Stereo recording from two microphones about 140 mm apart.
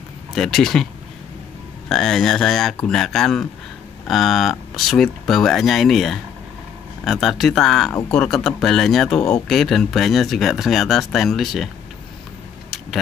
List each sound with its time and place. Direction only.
0.3 s speech: centre (ahead or behind)
1.9 s speech: 5° left (ahead or behind)